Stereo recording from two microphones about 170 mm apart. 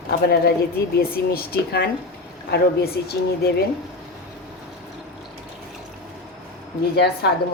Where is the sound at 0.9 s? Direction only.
65° left (ahead or behind).